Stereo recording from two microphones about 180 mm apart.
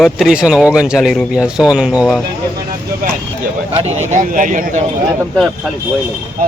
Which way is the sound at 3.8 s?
40° right (ahead or behind).